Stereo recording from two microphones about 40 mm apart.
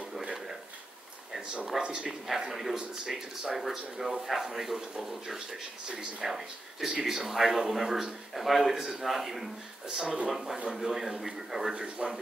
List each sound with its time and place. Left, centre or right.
1.8 s a man's voice: right
2.0 s speech: centre
9.8 s speech: centre
10.3 s speech: centre
11.7 s a man's voice: right